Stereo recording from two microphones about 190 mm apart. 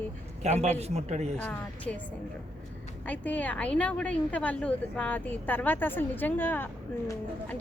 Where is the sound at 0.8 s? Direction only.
35° right (ahead or behind).